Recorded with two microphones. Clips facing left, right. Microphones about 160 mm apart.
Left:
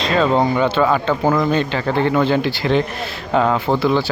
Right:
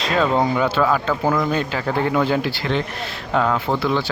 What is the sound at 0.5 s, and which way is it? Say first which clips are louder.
Speech: left 2 dB; centre (ahead or behind).